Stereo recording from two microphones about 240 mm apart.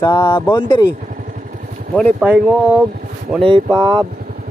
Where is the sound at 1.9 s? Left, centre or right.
Centre.